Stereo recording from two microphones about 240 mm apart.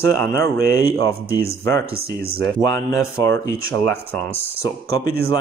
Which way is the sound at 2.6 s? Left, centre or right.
Centre.